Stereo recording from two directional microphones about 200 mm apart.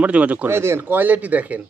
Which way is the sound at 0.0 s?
5° right (ahead or behind).